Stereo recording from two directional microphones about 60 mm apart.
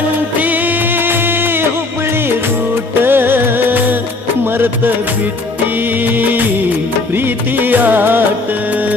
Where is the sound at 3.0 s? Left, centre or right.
Right.